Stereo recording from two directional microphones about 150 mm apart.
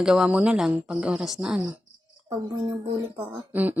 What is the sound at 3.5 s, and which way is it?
Speech, 10° right (ahead or behind).